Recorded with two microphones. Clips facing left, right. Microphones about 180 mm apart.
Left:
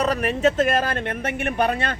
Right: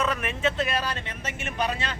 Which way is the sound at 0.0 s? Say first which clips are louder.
Left 7 dB; 40° left (ahead or behind).